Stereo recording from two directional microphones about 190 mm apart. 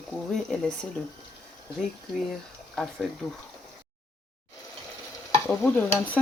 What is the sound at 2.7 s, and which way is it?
Speech, centre (ahead or behind).